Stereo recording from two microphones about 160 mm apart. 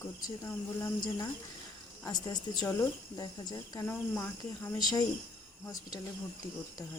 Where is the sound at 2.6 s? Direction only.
20° left (ahead or behind).